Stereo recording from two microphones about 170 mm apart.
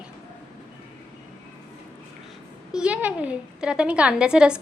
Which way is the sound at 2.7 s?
5° right (ahead or behind).